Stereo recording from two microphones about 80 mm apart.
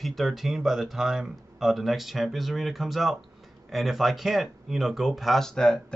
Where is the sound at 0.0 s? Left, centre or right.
Centre.